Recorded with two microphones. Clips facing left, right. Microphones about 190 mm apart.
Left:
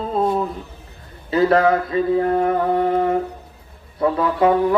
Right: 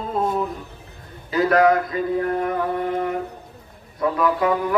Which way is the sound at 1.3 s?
30° left (ahead or behind).